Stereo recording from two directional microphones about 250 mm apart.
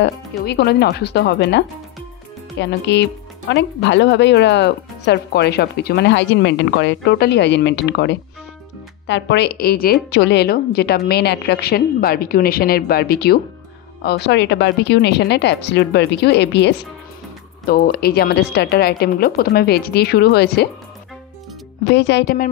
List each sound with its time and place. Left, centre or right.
0.5 s a woman's voice: left
2.6 s a woman's voice: left
21.9 s a woman's voice: left